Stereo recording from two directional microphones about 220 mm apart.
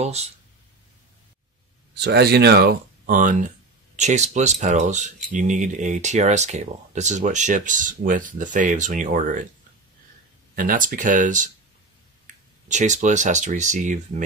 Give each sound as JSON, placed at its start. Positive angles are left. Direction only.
{"t": 0.0, "sound": "speech", "side_deg": -30}
{"t": 2.0, "sound": "speech", "side_deg": -50}
{"t": 10.5, "sound": "speech", "side_deg": -40}